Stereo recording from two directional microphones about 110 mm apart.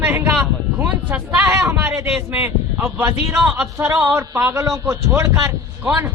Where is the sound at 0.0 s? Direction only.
20° right (ahead or behind).